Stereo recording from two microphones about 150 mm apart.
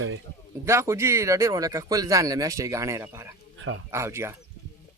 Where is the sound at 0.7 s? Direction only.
20° right (ahead or behind).